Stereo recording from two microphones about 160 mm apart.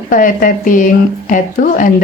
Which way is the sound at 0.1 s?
60° left (ahead or behind).